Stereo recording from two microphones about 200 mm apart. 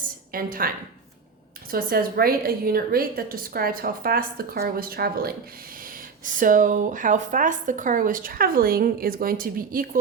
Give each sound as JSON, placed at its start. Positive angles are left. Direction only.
{"t": 0.3, "sound": "a woman's voice", "side_deg": -45}
{"t": 1.7, "sound": "speech", "side_deg": -45}